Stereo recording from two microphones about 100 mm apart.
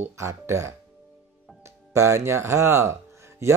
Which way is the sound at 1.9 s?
30° right (ahead or behind).